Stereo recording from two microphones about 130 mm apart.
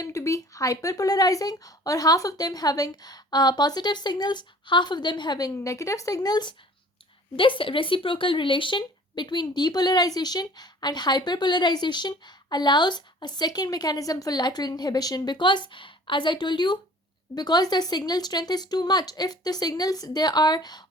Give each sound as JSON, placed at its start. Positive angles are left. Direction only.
{"t": 0.0, "sound": "speech", "side_deg": 25}